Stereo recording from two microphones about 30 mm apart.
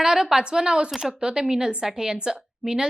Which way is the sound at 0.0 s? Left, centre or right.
Centre.